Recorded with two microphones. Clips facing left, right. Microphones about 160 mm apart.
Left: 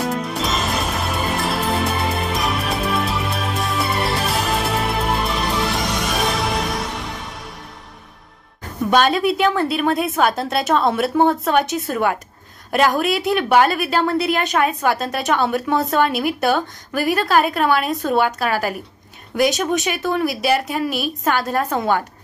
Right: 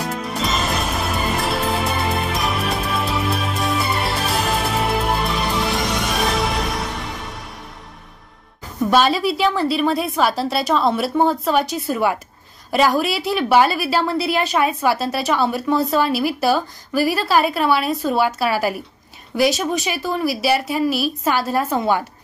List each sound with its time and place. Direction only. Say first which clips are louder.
0.0 s music: left 2 dB; centre (ahead or behind)
8.9 s a woman's voice: left 1 dB; centre (ahead or behind)